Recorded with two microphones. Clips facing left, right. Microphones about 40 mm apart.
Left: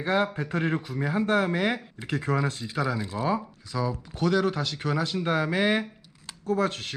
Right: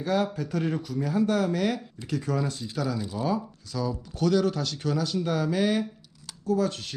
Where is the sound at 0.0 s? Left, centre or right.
Left.